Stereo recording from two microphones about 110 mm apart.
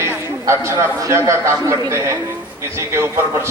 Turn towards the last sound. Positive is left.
turn(degrees=-25)  # may be behind; listen again after turning